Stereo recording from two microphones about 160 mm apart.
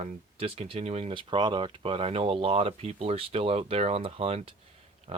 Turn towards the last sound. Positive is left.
turn(degrees=-35)  # may be behind; listen again after turning